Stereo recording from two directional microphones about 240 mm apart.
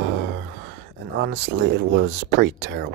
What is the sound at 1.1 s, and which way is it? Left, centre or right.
Speech, right.